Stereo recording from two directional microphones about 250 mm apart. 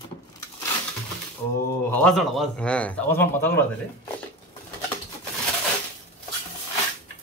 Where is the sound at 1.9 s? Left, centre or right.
Centre.